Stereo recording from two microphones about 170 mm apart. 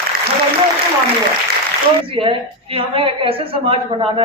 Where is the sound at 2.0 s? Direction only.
30° right (ahead or behind).